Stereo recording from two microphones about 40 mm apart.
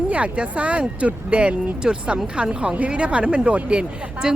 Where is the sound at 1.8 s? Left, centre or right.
Centre.